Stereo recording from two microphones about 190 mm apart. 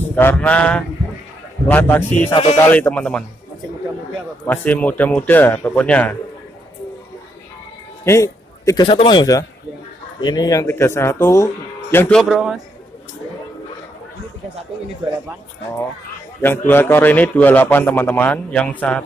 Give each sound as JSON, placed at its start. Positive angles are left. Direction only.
{"t": 0.1, "sound": "a man's voice", "side_deg": 10}
{"t": 2.3, "sound": "speech", "side_deg": 30}
{"t": 2.7, "sound": "a man's voice", "side_deg": 10}
{"t": 4.5, "sound": "a man's voice", "side_deg": 10}
{"t": 8.0, "sound": "a sound", "side_deg": 15}
{"t": 8.8, "sound": "a man's voice", "side_deg": 30}
{"t": 16.3, "sound": "a man's voice", "side_deg": 10}